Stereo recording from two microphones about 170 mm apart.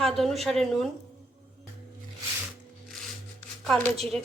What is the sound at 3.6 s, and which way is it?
Speech, 5° left (ahead or behind).